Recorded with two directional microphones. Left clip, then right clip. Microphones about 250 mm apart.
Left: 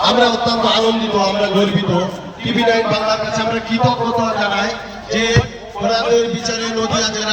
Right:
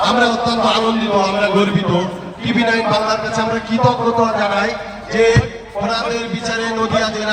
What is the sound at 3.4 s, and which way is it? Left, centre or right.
A man's voice, centre.